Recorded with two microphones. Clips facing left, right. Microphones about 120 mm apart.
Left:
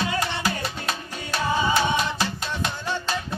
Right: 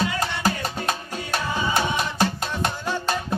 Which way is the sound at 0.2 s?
40° right (ahead or behind).